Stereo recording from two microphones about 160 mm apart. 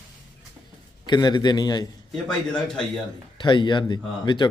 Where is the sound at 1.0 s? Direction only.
25° left (ahead or behind).